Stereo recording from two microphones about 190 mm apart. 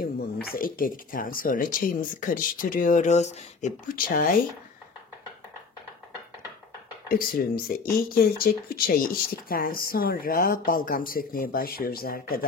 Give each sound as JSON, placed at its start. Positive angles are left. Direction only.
{"t": 0.0, "sound": "speech", "side_deg": 50}
{"t": 3.9, "sound": "speech", "side_deg": 50}
{"t": 7.2, "sound": "speech", "side_deg": 50}